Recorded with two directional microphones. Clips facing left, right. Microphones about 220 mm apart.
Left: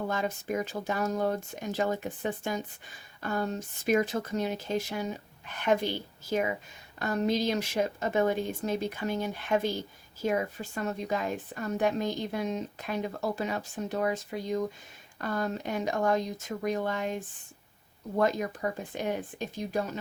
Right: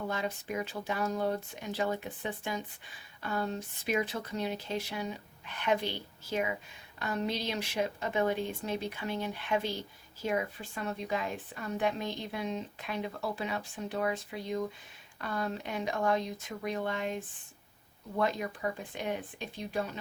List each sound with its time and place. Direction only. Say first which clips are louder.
0.1 s a woman's voice: left 4 dB; 45° left (ahead or behind)
7.0 s a woman's voice: left 6 dB; 45° left (ahead or behind)
18.6 s a woman's voice: left 2 dB; 45° left (ahead or behind)